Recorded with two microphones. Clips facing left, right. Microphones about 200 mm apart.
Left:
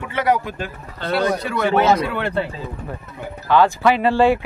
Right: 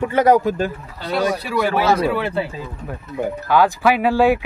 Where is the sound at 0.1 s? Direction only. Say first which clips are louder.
Right 4 dB; 40° right (ahead or behind).